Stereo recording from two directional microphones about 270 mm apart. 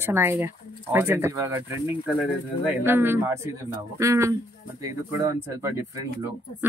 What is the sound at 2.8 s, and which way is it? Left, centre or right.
Speech, centre.